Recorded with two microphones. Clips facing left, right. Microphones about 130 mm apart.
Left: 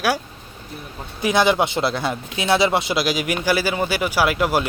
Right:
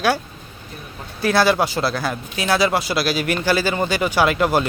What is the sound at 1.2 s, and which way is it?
Speech, 15° left (ahead or behind).